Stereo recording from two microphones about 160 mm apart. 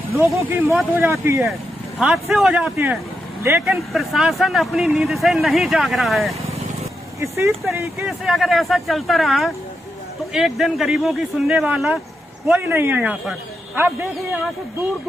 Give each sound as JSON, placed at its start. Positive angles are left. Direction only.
{"t": 0.2, "sound": "a man's voice", "side_deg": -15}
{"t": 2.0, "sound": "a man's voice", "side_deg": 0}
{"t": 3.4, "sound": "a man's voice", "side_deg": -15}
{"t": 3.7, "sound": "a man's voice", "side_deg": 0}
{"t": 7.2, "sound": "a man's voice", "side_deg": -15}
{"t": 8.1, "sound": "a man's voice", "side_deg": 0}